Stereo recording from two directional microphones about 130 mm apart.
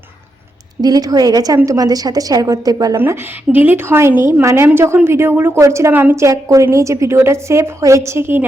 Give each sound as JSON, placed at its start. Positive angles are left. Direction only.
{"t": 0.8, "sound": "a woman's voice", "side_deg": -30}
{"t": 3.0, "sound": "a woman's voice", "side_deg": -15}